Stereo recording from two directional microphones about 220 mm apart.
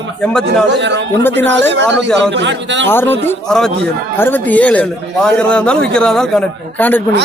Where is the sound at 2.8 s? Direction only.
10° left (ahead or behind).